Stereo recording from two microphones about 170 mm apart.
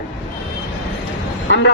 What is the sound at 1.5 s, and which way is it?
Bow-wow, 90° left.